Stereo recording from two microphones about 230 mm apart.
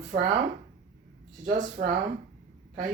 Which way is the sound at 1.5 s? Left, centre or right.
Right.